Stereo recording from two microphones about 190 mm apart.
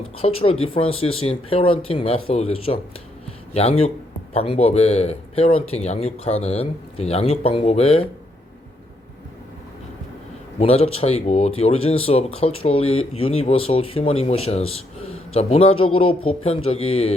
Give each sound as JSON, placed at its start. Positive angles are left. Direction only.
{"t": 0.2, "sound": "speech", "side_deg": 30}
{"t": 10.6, "sound": "speech", "side_deg": 30}